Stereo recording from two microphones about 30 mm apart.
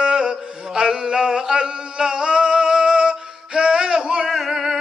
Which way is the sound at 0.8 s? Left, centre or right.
Right.